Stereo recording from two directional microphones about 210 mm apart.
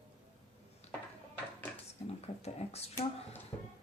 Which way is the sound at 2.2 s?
30° left (ahead or behind).